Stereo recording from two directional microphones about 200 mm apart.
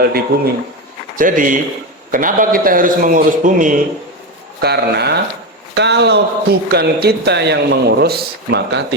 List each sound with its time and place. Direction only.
0.0 s a man's voice: 50° right (ahead or behind)
4.6 s a man's voice: 55° right (ahead or behind)